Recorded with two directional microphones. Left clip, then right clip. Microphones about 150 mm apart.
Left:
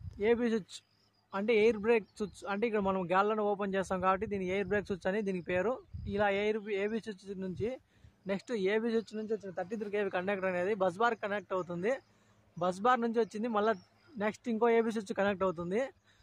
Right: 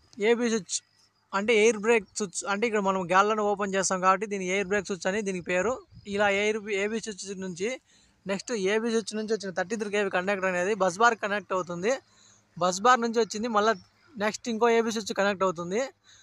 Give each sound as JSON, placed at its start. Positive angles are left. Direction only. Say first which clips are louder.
{"t": 0.1, "sound": "speech", "louder": "right 5 dB", "side_deg": -25}